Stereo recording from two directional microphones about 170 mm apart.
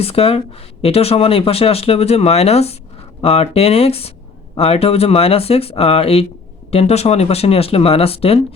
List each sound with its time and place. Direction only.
0.0 s speech: 35° left (ahead or behind)